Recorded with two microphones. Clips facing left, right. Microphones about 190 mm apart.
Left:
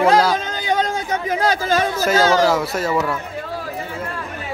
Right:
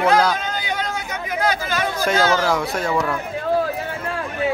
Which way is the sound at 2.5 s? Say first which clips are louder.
Left 2 dB; 5° left (ahead or behind).